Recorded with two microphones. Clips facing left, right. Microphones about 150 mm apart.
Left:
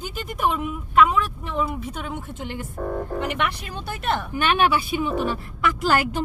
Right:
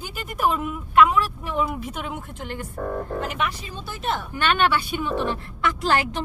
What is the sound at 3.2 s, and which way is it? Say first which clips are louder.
Speech: left 2 dB; 70° left (ahead or behind).